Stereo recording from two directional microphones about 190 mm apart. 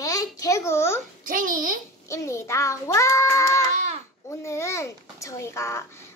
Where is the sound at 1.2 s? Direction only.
45° right (ahead or behind).